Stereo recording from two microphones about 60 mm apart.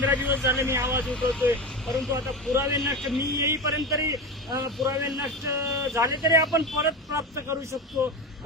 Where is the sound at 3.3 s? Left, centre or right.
Right.